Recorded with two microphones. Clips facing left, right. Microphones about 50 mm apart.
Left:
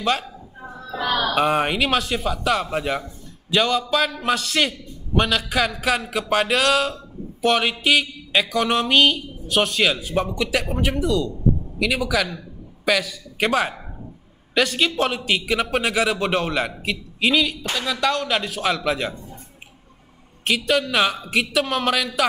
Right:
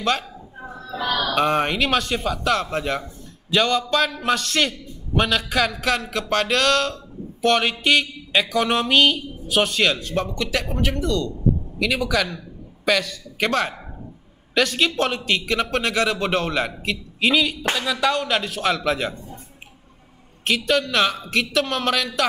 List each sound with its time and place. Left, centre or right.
0.0 s a man's voice: centre
0.9 s speech: centre
1.2 s a man's voice: centre
20.4 s a man's voice: centre